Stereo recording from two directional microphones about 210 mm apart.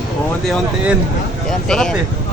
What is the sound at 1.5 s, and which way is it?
Speech, centre (ahead or behind).